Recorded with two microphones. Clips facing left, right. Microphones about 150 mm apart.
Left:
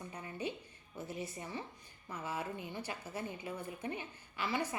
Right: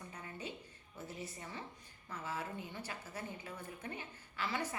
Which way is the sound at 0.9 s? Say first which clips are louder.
Left 4 dB; 15° left (ahead or behind).